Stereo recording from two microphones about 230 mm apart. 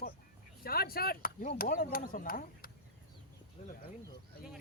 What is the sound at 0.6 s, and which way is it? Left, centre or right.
Speech, left.